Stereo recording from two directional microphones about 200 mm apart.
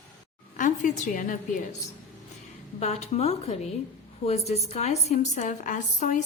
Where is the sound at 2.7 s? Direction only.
35° left (ahead or behind).